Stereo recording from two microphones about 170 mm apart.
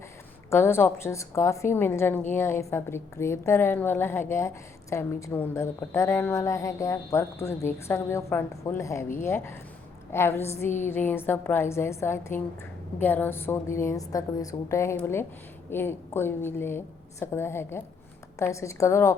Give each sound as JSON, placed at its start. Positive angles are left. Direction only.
{"t": 0.5, "sound": "a woman's voice", "side_deg": 15}